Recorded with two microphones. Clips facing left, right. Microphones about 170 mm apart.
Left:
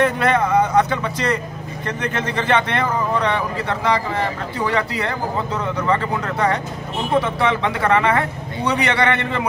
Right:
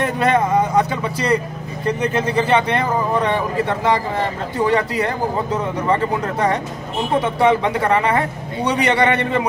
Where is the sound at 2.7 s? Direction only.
20° right (ahead or behind).